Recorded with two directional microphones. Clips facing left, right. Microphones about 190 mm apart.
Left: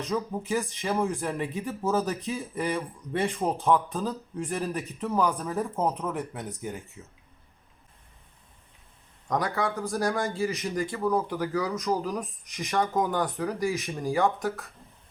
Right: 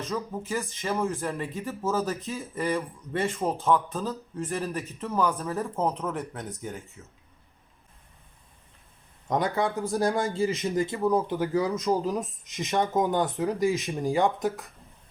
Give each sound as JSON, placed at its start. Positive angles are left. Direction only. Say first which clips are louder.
{"t": 0.0, "sound": "speech", "louder": "left 2 dB", "side_deg": 15}
{"t": 9.3, "sound": "speech", "louder": "right 2 dB", "side_deg": -20}